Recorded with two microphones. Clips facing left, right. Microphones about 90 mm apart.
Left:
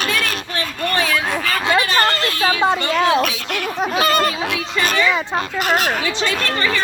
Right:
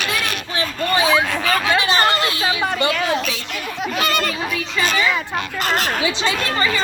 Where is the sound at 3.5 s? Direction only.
55° left (ahead or behind).